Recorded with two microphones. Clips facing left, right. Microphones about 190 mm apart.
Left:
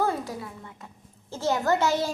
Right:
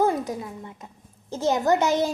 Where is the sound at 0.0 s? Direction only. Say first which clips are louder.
Right 4 dB; 20° right (ahead or behind).